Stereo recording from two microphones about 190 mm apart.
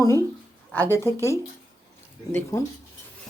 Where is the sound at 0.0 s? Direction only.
15° left (ahead or behind).